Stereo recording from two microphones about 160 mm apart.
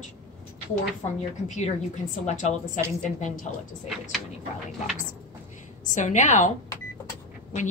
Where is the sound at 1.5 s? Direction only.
50° left (ahead or behind).